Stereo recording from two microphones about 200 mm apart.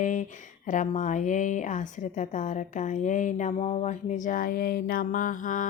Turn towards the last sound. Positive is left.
turn(degrees=40)  # may be behind; listen again after turning